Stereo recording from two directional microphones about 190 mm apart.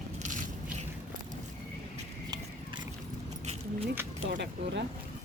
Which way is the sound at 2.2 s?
20° right (ahead or behind).